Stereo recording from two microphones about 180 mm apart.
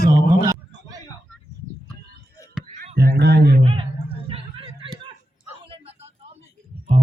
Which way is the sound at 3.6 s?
30° right (ahead or behind).